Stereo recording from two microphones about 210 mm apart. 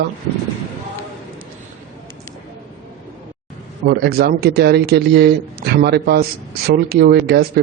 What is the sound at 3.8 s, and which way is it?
Speech, 50° right (ahead or behind).